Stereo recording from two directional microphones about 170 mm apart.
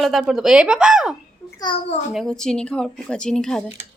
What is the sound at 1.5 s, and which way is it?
Speech, 25° left (ahead or behind).